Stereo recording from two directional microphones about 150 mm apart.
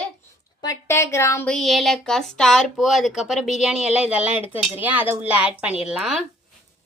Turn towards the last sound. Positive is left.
turn(degrees=-5)  # may be behind; listen again after turning